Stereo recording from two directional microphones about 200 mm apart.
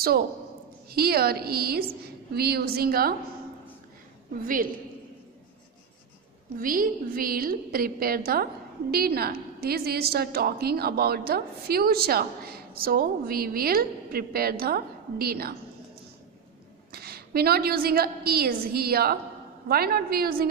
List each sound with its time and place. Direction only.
0.8 s a woman's voice: 50° right (ahead or behind)
6.6 s a woman's voice: 45° right (ahead or behind)
16.9 s a woman's voice: 50° right (ahead or behind)